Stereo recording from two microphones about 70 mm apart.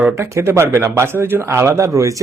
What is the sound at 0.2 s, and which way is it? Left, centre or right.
Speech, right.